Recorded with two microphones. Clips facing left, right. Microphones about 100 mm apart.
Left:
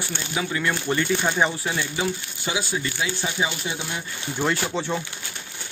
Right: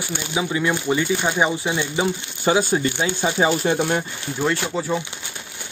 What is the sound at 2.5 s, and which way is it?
Speech, 45° right (ahead or behind).